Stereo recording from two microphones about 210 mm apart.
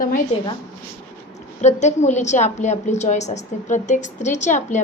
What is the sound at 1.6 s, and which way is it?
A woman's voice, 35° left (ahead or behind).